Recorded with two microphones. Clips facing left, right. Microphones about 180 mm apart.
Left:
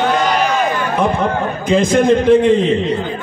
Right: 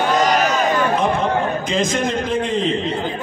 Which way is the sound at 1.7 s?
55° left (ahead or behind).